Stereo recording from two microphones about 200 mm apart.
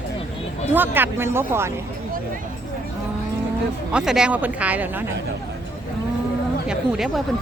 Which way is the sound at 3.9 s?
5° right (ahead or behind).